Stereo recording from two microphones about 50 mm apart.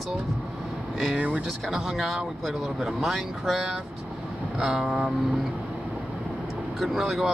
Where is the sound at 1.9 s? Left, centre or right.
Centre.